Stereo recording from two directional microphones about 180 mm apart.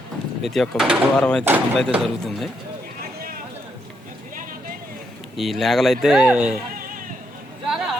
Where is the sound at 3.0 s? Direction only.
55° right (ahead or behind).